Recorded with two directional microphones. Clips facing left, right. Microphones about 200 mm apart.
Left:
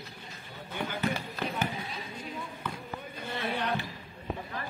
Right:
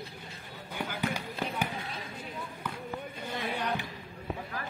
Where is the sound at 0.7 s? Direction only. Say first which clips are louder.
Left 2 dB; 10° right (ahead or behind).